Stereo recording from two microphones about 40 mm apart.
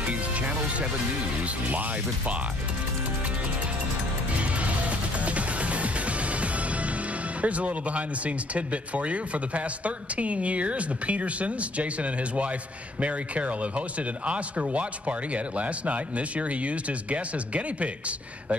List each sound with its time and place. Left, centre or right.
0.1 s music: right
1.4 s speech: right
4.4 s music: right
7.4 s speech: right